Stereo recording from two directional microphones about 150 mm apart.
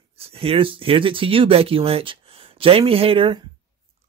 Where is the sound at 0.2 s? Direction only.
40° right (ahead or behind).